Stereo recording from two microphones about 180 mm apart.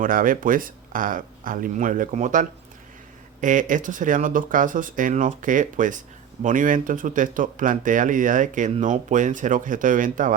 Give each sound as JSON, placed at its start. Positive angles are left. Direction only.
{"t": 0.0, "sound": "speech", "side_deg": -50}